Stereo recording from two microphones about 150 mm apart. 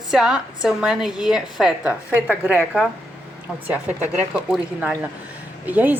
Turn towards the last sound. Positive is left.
turn(degrees=-10)  # may be behind; listen again after turning